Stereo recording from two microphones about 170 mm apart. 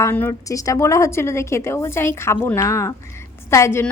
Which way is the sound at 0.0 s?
15° left (ahead or behind).